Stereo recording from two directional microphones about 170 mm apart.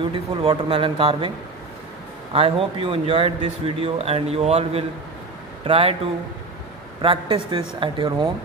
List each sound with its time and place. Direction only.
0.0 s a man's voice: 30° right (ahead or behind)
2.3 s a man's voice: 30° right (ahead or behind)
7.0 s speech: 30° right (ahead or behind)